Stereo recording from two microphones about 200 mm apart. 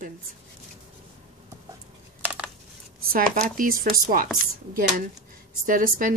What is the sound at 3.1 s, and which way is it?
Speech, 45° right (ahead or behind).